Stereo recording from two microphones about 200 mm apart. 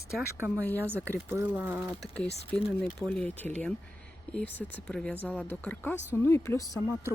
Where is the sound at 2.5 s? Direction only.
5° left (ahead or behind).